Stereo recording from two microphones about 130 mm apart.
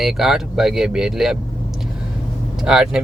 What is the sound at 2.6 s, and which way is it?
Speech, 5° right (ahead or behind).